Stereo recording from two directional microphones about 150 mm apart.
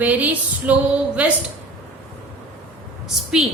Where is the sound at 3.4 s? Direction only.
5° right (ahead or behind).